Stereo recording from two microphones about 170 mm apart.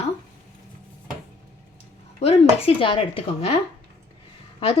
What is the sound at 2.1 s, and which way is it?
A woman's voice, 35° left (ahead or behind).